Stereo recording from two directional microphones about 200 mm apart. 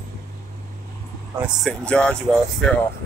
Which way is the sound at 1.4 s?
Centre (ahead or behind).